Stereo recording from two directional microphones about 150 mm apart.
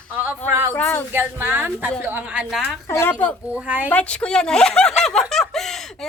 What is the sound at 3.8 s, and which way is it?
A woman's voice, 10° left (ahead or behind).